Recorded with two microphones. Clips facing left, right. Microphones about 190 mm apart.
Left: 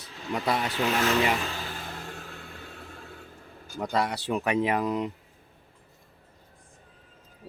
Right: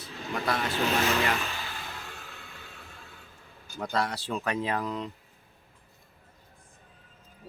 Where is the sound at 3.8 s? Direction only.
15° left (ahead or behind).